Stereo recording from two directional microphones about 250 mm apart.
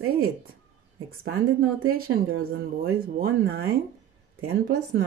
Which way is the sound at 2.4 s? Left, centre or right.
Right.